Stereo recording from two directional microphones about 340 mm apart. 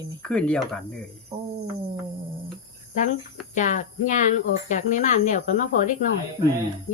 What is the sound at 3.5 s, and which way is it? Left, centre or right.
Speech, left.